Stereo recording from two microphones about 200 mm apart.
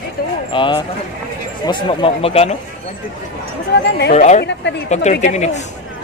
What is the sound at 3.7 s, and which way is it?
Speech, 55° left (ahead or behind).